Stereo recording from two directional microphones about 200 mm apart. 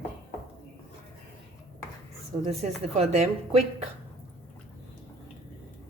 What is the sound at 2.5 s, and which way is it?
A woman's voice, 30° right (ahead or behind).